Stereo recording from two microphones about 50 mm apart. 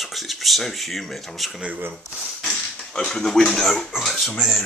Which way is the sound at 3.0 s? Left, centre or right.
Centre.